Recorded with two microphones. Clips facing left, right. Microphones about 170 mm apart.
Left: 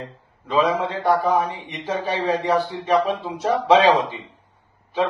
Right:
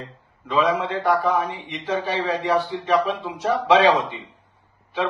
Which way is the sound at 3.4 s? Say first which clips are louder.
Left 1 dB; 35° left (ahead or behind).